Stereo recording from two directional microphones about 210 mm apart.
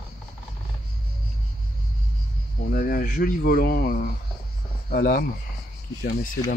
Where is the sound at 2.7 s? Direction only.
45° left (ahead or behind).